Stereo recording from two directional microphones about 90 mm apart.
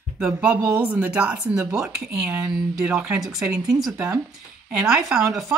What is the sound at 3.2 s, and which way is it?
Speech, 5° right (ahead or behind).